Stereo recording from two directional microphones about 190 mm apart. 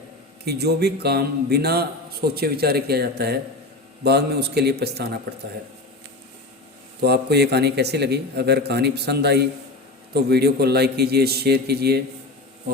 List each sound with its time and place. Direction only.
0.4 s a man's voice: 60° right (ahead or behind)
7.0 s a man's voice: 60° right (ahead or behind)